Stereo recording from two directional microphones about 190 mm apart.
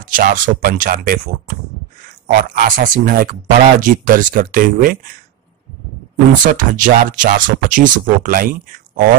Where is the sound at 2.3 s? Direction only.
45° right (ahead or behind).